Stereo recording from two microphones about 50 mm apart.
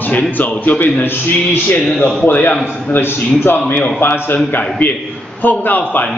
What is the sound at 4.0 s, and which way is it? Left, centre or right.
Speech, left.